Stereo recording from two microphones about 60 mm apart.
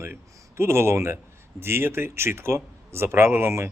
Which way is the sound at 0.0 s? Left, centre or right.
Right.